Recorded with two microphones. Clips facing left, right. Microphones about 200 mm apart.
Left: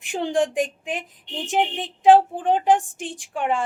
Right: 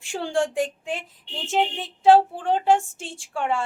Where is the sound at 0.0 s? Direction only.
20° left (ahead or behind).